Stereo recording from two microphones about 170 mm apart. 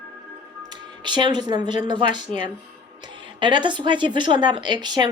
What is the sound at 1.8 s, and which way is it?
A woman's voice, 25° right (ahead or behind).